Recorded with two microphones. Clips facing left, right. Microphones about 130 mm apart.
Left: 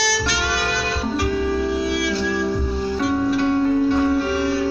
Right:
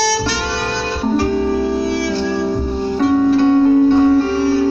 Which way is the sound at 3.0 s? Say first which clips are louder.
Right 8 dB; 30° right (ahead or behind).